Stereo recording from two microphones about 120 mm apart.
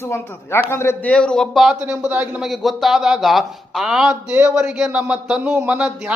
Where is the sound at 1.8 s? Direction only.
15° right (ahead or behind).